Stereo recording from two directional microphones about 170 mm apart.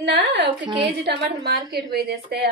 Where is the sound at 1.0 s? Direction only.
70° right (ahead or behind).